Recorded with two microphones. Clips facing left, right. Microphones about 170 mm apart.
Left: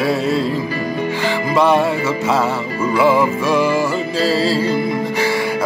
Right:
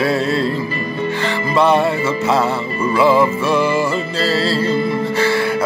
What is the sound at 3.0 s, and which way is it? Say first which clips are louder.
Music: right 1 dB; 10° left (ahead or behind).